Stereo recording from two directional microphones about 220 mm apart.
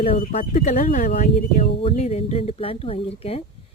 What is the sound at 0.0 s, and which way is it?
Speech, 30° left (ahead or behind).